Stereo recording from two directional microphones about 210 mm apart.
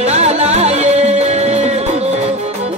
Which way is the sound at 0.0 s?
30° right (ahead or behind).